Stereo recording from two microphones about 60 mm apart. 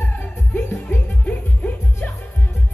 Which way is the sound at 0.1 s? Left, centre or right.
Left.